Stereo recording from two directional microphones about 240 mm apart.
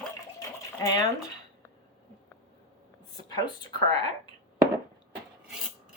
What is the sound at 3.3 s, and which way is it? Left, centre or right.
Speech, centre.